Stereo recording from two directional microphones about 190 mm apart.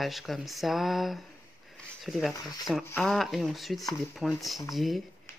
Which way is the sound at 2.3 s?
20° left (ahead or behind).